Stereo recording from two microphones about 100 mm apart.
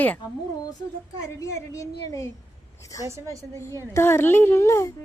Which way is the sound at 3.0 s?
30° right (ahead or behind).